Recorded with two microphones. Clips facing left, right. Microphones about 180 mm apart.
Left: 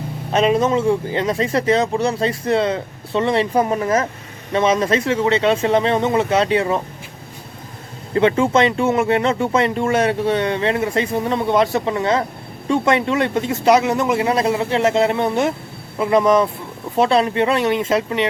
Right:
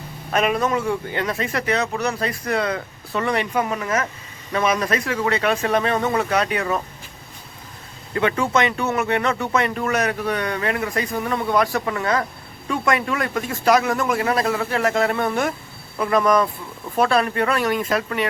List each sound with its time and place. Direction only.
0.3 s speech: 25° left (ahead or behind)
8.1 s speech: 25° left (ahead or behind)